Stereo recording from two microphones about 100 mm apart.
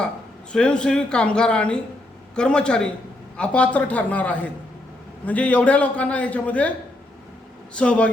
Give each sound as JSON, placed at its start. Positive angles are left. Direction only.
{"t": 0.5, "sound": "a man's voice", "side_deg": 10}
{"t": 7.8, "sound": "a man's voice", "side_deg": 10}